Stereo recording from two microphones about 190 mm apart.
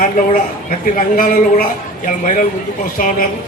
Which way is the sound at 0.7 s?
45° left (ahead or behind).